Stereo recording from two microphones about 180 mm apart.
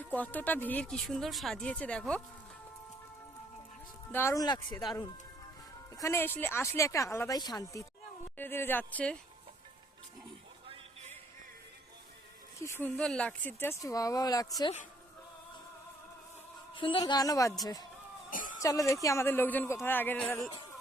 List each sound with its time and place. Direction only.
0.1 s speech: 10° left (ahead or behind)
4.1 s speech: 15° left (ahead or behind)
12.5 s speech: 15° left (ahead or behind)
16.7 s speech: 30° left (ahead or behind)
18.3 s a sound: 50° left (ahead or behind)
18.6 s speech: 20° left (ahead or behind)